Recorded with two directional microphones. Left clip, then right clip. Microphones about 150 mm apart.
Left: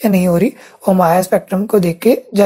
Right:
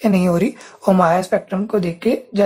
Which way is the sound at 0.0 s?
20° left (ahead or behind).